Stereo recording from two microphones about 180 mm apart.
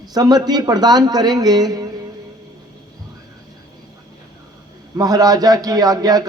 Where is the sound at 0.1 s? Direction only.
20° right (ahead or behind).